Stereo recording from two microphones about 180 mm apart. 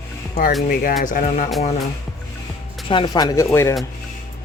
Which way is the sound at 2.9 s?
25° left (ahead or behind).